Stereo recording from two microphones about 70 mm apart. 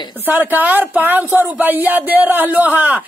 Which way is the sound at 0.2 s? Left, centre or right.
Right.